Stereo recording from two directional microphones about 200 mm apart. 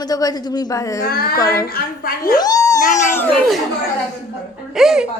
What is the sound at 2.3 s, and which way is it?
Speech, 20° left (ahead or behind).